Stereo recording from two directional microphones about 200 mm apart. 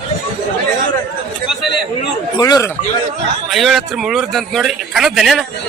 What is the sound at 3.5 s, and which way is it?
Speech, centre (ahead or behind).